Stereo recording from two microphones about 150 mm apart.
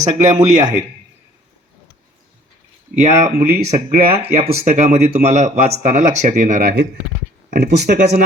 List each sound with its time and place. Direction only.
0.0 s speech: 50° right (ahead or behind)
3.1 s speech: 20° right (ahead or behind)
3.6 s speech: 40° right (ahead or behind); by 6.8 s 70° right (ahead or behind)
7.5 s speech: 90° right